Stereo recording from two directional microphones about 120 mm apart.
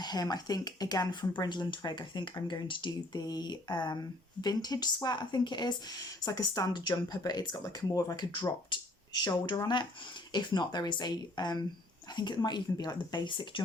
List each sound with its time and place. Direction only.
0.0 s speech: 35° left (ahead or behind)